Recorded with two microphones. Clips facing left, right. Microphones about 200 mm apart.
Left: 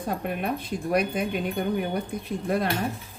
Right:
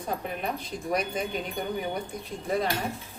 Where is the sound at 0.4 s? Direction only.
60° left (ahead or behind).